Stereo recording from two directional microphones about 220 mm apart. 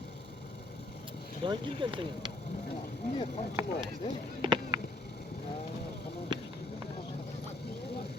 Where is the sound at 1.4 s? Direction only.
20° right (ahead or behind).